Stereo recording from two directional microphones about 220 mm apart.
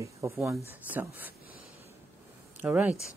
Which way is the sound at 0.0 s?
15° right (ahead or behind).